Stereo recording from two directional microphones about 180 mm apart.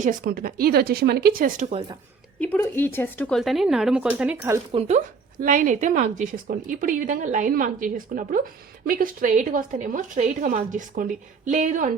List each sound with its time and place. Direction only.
0.0 s speech: 50° right (ahead or behind)
2.4 s speech: 10° left (ahead or behind); by 4.6 s 10° right (ahead or behind)
4.7 s speech: 35° right (ahead or behind)